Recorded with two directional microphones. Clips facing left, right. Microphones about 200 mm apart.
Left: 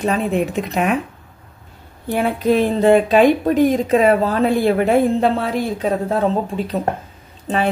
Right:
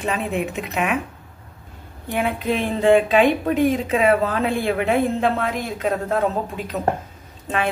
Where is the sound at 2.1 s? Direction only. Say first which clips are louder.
Left 6 dB; 40° left (ahead or behind).